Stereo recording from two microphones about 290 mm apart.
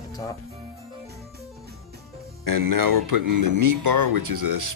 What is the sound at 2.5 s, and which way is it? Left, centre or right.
Speech, right.